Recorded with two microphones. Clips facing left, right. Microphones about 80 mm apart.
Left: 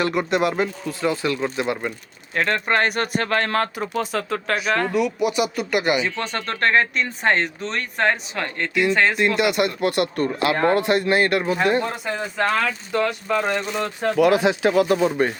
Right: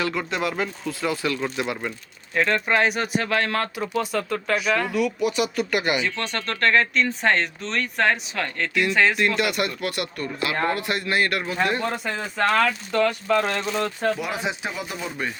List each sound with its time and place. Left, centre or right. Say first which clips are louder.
0.5 s speech: left 3 dB; centre
6.4 s speech: left 1 dB; centre
9.4 s speech: left 5 dB; left
9.9 s speech: left 8 dB; left
11.8 s speech: left 2 dB; centre
14.2 s speech: left 11 dB; left